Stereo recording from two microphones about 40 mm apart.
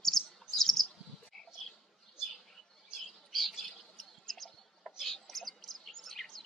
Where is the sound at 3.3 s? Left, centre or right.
Centre.